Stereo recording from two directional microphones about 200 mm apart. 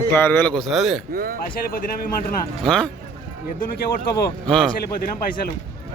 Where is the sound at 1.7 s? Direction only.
45° left (ahead or behind).